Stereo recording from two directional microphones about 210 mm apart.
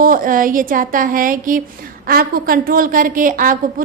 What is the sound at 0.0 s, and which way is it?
A woman's voice, 40° right (ahead or behind).